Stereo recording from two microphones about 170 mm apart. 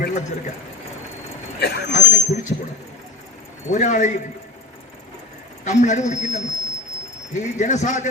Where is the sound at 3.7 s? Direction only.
45° left (ahead or behind).